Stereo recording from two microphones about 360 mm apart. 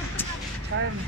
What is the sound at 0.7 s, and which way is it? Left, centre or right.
Speech, right.